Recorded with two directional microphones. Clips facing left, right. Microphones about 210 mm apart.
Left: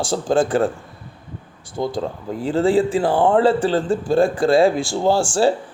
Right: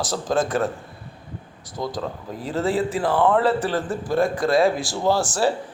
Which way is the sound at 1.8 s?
30° left (ahead or behind).